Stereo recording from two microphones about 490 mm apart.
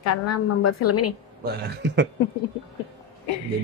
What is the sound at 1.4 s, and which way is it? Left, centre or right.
Speech, centre.